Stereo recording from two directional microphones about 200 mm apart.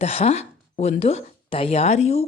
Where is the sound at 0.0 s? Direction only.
30° left (ahead or behind).